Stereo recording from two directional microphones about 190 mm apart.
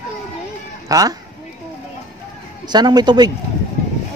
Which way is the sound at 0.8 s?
20° right (ahead or behind).